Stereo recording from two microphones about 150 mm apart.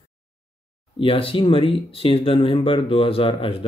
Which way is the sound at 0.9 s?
35° left (ahead or behind).